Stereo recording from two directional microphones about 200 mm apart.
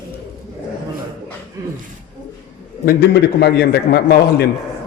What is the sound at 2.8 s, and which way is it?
A man's voice, 50° left (ahead or behind).